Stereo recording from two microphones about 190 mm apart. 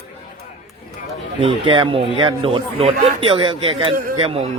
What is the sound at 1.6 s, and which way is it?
Speech, 25° right (ahead or behind).